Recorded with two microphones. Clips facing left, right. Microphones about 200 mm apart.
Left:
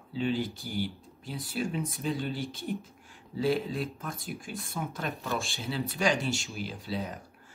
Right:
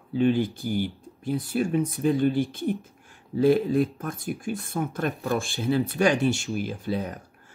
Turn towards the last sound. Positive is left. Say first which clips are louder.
# right 6 dB
turn(degrees=-55)  # may be behind; listen again after turning